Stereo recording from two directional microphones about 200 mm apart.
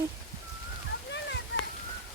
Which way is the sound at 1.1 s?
60° left (ahead or behind).